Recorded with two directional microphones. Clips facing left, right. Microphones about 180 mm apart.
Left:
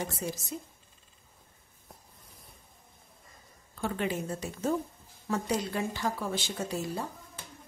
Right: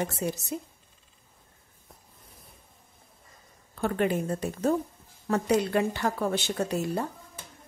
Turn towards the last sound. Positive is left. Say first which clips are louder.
# right 5 dB
turn(degrees=-65)  # may be behind; listen again after turning